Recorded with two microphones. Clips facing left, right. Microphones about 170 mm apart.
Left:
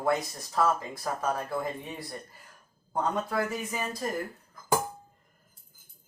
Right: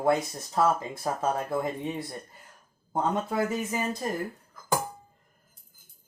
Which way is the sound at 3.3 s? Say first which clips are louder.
Right 3 dB; 25° right (ahead or behind).